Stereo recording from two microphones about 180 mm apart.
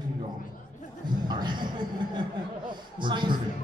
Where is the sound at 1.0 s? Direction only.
25° right (ahead or behind).